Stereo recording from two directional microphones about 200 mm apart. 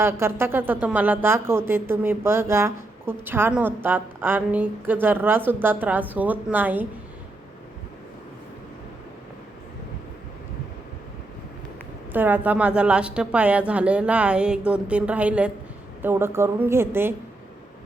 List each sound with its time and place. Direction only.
0.0 s speech: 10° right (ahead or behind)
12.1 s speech: 10° right (ahead or behind)